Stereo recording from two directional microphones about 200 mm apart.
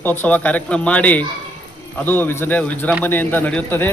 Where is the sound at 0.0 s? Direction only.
10° left (ahead or behind).